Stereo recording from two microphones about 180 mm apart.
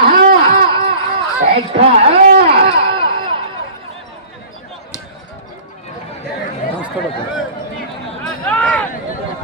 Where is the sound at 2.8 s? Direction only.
30° right (ahead or behind).